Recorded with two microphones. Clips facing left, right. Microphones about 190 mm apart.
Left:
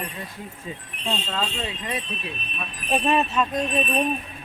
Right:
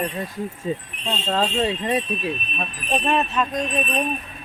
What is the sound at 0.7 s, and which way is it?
Speech, 35° right (ahead or behind).